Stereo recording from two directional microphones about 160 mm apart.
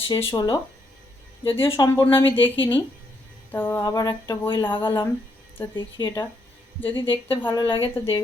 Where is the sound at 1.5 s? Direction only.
15° left (ahead or behind).